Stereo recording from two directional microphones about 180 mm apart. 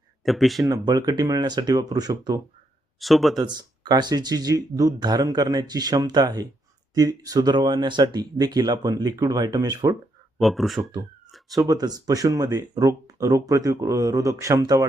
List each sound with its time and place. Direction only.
0.3 s speech: centre (ahead or behind)
0.7 s speech: 20° right (ahead or behind)
3.0 s speech: centre (ahead or behind)
3.3 s speech: 25° right (ahead or behind)
10.4 s speech: centre (ahead or behind)
11.5 s speech: 20° right (ahead or behind)